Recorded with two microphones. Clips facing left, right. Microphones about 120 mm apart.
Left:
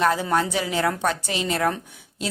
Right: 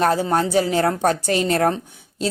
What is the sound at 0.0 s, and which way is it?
A woman's voice, 35° right (ahead or behind).